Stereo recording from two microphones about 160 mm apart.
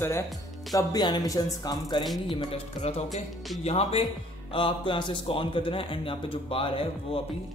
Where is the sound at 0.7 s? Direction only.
25° left (ahead or behind).